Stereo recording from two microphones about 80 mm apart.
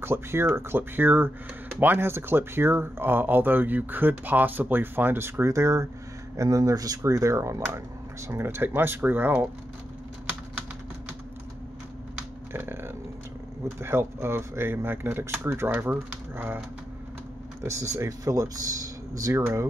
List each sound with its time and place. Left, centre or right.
0.0 s speech: right
12.5 s speech: right
17.6 s speech: right